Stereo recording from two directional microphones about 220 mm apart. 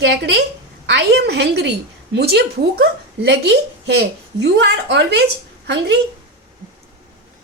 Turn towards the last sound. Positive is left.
turn(degrees=-50)  # may be behind; listen again after turning